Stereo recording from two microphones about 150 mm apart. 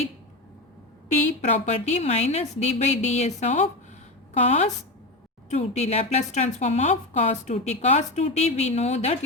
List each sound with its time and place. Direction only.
1.5 s a woman's voice: 50° left (ahead or behind)